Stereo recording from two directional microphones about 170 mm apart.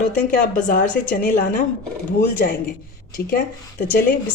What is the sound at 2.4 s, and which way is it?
Speech, 65° left (ahead or behind).